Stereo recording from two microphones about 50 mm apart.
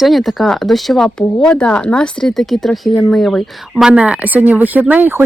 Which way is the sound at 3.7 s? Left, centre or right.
Right.